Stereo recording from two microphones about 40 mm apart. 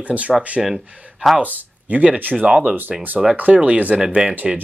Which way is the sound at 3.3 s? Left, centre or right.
Right.